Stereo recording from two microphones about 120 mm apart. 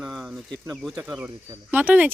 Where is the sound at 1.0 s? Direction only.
15° right (ahead or behind).